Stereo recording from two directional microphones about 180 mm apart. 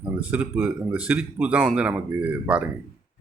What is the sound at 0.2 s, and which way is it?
Speech, 5° right (ahead or behind).